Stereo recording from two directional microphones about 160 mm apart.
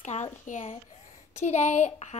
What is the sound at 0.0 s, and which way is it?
A woman's voice, 45° left (ahead or behind).